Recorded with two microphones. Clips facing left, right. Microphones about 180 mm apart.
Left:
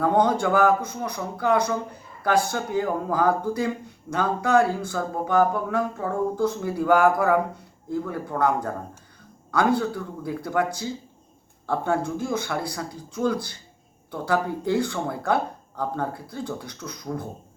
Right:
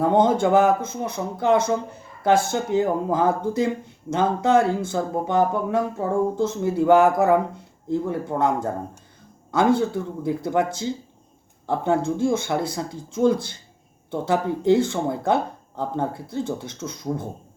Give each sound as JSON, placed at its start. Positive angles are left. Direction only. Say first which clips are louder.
{"t": 0.0, "sound": "speech", "louder": "right 3 dB", "side_deg": -25}